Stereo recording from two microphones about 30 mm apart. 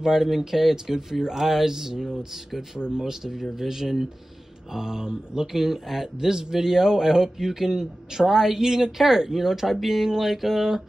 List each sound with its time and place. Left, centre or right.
0.0 s a man's voice: centre